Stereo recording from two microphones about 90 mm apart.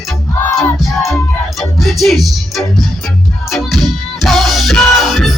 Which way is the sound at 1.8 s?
Centre (ahead or behind).